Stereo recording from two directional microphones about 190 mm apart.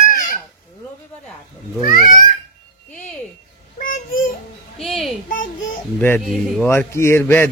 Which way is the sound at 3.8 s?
45° left (ahead or behind).